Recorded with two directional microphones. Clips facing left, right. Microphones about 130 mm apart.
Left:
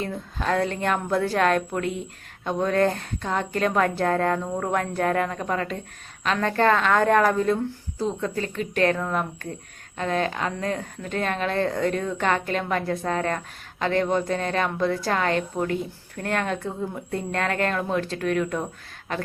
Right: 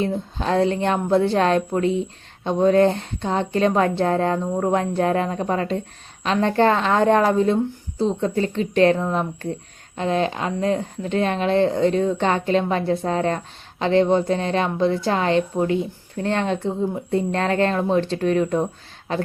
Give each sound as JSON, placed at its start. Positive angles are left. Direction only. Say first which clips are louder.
{"t": 0.0, "sound": "speech", "louder": "right 5 dB", "side_deg": -25}